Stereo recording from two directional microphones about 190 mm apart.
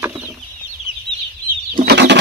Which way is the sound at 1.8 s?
65° right (ahead or behind).